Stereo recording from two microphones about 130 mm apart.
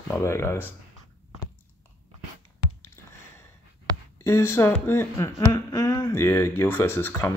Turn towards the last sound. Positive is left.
turn(degrees=20)  # may be behind; listen again after turning